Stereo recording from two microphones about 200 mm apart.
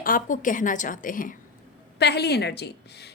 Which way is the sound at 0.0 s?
45° left (ahead or behind).